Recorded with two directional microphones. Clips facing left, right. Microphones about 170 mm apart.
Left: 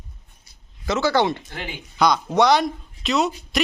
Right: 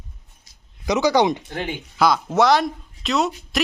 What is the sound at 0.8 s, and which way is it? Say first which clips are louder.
Speech: right 2 dB; 15° right (ahead or behind).